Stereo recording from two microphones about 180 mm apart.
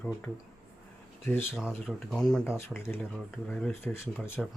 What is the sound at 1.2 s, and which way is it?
Speech, 15° left (ahead or behind).